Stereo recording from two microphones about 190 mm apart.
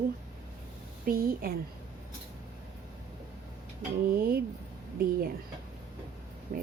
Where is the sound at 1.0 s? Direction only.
50° right (ahead or behind).